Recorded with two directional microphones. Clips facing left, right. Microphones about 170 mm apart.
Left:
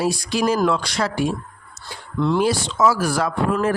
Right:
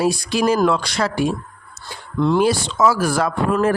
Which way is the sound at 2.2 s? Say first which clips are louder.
Right 3 dB; 60° right (ahead or behind).